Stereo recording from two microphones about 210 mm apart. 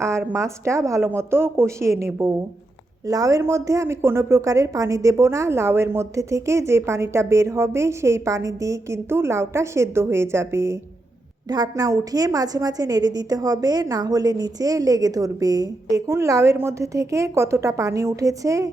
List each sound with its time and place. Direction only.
0.0 s a woman's voice: 10° right (ahead or behind)